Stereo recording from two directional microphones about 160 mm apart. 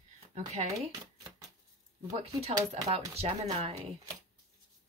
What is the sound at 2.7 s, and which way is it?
A woman's voice, 40° right (ahead or behind).